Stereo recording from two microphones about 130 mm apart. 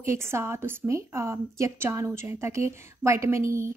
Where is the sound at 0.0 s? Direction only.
20° right (ahead or behind).